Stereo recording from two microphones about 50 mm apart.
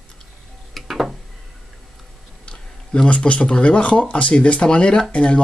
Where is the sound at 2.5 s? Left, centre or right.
Centre.